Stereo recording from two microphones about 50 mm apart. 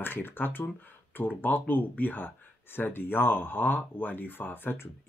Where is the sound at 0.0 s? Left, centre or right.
Left.